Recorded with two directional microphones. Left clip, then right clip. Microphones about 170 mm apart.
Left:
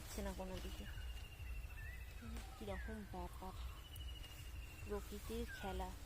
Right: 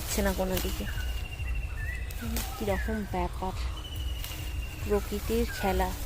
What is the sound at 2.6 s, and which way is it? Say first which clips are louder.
Speech: right 18 dB; 5° right (ahead or behind).